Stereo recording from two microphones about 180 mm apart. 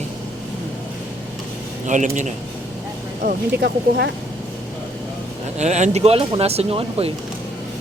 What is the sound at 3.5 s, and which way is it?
Speech, 70° right (ahead or behind).